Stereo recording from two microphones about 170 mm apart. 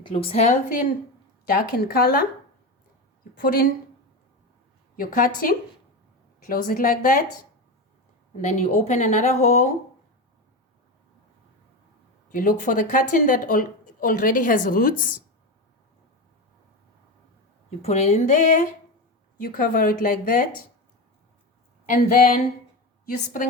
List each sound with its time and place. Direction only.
0.0 s a woman's voice: 35° left (ahead or behind)
1.5 s speech: 60° left (ahead or behind)
3.3 s speech: 60° left (ahead or behind)
4.9 s speech: 55° left (ahead or behind)
8.4 s a woman's voice: 45° left (ahead or behind)
12.3 s a woman's voice: 50° left (ahead or behind)
17.7 s a woman's voice: 40° left (ahead or behind)
21.8 s speech: 55° left (ahead or behind)